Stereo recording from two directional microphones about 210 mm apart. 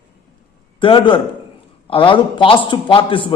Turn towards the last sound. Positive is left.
turn(degrees=25)  # may be behind; listen again after turning